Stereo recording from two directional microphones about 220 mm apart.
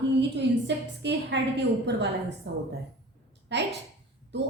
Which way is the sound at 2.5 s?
50° right (ahead or behind).